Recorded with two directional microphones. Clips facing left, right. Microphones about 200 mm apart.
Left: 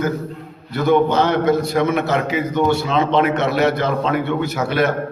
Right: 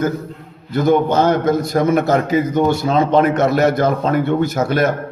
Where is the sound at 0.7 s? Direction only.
45° right (ahead or behind).